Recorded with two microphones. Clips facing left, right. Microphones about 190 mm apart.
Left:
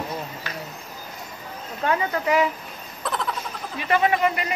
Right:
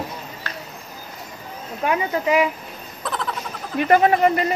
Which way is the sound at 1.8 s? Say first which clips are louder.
Right 2 dB; 20° right (ahead or behind).